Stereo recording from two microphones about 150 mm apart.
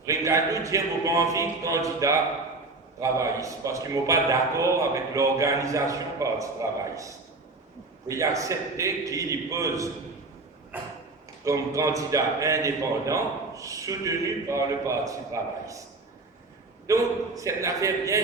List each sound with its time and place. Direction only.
0.0 s speech: 20° right (ahead or behind)
10.7 s a sound: 10° right (ahead or behind)
11.4 s speech: 20° right (ahead or behind)
16.8 s speech: 20° right (ahead or behind)